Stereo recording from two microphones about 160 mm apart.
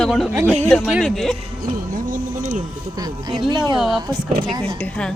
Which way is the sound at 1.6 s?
55° right (ahead or behind).